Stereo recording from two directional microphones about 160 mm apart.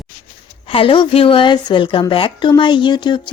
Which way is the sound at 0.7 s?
35° left (ahead or behind).